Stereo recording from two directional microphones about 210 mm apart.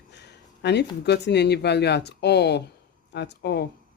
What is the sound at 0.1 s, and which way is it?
Speech, 55° left (ahead or behind).